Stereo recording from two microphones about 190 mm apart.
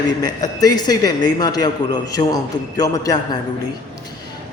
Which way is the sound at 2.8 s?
20° left (ahead or behind).